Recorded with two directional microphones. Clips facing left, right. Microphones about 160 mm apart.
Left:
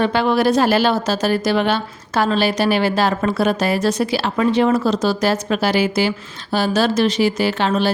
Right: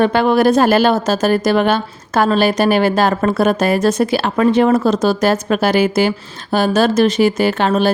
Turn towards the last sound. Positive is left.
turn(degrees=-50)  # may be behind; listen again after turning